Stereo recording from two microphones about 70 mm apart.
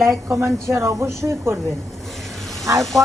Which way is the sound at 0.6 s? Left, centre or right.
Right.